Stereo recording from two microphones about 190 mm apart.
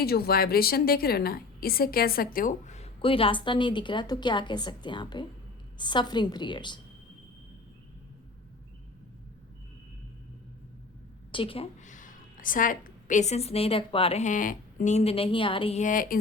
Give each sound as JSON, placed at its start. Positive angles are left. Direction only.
{"t": 0.0, "sound": "a woman's voice", "side_deg": 55}
{"t": 11.3, "sound": "a woman's voice", "side_deg": 25}